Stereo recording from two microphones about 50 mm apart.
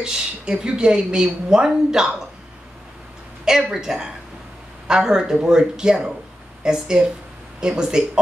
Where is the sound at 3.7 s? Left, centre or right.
Centre.